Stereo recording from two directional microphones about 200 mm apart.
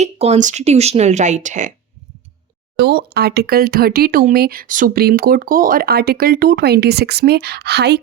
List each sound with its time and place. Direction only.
0.0 s speech: 35° right (ahead or behind)
2.7 s speech: 55° right (ahead or behind)